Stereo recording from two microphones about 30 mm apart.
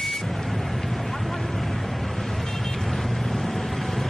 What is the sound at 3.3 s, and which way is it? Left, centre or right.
Vehicle, centre.